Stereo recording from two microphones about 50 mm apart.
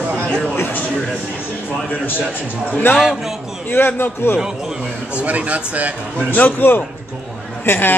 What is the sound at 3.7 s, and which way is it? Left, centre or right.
Speech, left.